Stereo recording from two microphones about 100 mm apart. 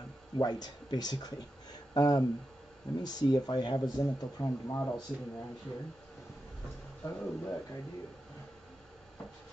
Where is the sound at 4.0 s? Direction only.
40° left (ahead or behind).